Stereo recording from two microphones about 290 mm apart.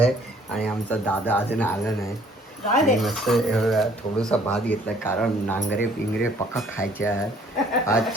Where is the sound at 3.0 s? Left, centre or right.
Centre.